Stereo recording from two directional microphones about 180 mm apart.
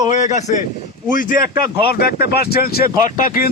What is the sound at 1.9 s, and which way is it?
Speech, 60° left (ahead or behind).